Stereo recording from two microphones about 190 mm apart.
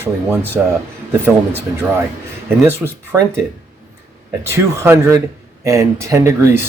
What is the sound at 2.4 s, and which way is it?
Speech, 10° right (ahead or behind).